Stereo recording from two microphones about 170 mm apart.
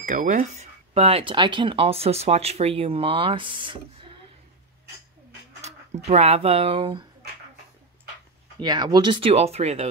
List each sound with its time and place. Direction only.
0.0 s speech: 50° right (ahead or behind); by 4.1 s 30° right (ahead or behind)
6.0 s speech: 40° right (ahead or behind)
8.5 s speech: 25° right (ahead or behind)